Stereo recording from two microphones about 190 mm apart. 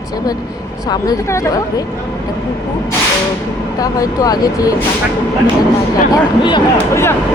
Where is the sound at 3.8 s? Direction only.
20° left (ahead or behind).